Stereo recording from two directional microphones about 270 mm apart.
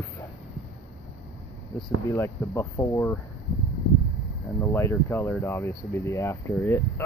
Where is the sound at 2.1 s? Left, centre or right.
Centre.